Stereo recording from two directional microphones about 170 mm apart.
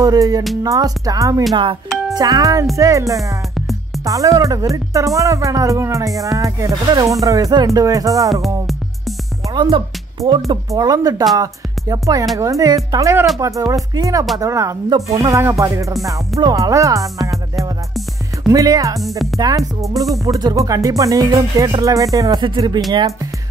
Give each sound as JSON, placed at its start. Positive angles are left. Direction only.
{"t": 0.0, "sound": "speech", "side_deg": -20}
{"t": 9.5, "sound": "speech", "side_deg": -25}
{"t": 11.3, "sound": "music", "side_deg": -20}
{"t": 12.4, "sound": "speech", "side_deg": -20}
{"t": 17.2, "sound": "music", "side_deg": 0}
{"t": 18.5, "sound": "speech", "side_deg": -20}
{"t": 18.9, "sound": "speech", "side_deg": 0}
{"t": 19.3, "sound": "speech", "side_deg": -20}